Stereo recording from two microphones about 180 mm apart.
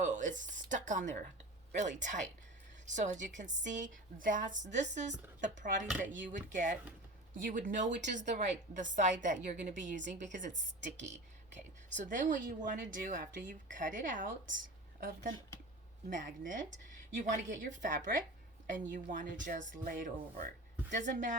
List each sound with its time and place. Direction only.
0.0 s a sound: 45° right (ahead or behind)
1.7 s speech: 45° right (ahead or behind)
16.0 s speech: 45° right (ahead or behind)